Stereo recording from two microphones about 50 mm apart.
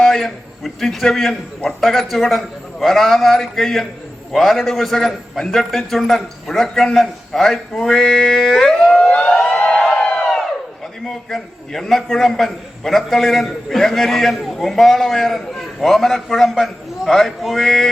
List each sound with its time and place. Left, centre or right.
0.0 s a man's voice: centre
9.0 s siren: left
9.5 s a sound: left
9.7 s crowd: centre
11.0 s a man's voice: centre